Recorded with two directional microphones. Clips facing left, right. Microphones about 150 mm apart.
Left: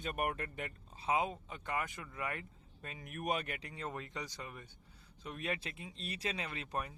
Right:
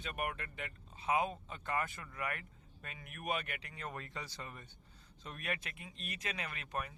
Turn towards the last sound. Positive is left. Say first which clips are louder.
# left 2 dB
turn(degrees=30)  # may be behind; listen again after turning